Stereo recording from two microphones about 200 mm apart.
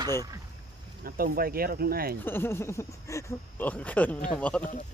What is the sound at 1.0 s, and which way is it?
Speech, 45° right (ahead or behind).